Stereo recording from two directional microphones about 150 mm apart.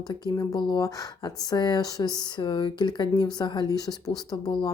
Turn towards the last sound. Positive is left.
turn(degrees=25)  # may be behind; listen again after turning